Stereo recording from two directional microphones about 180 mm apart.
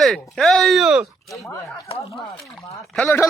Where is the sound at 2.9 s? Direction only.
10° left (ahead or behind).